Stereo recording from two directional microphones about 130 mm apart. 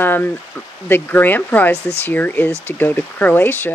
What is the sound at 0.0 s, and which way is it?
Speech, 15° left (ahead or behind).